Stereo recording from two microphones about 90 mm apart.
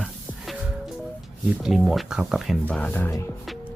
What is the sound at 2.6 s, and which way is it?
Didgeridoo, 15° left (ahead or behind).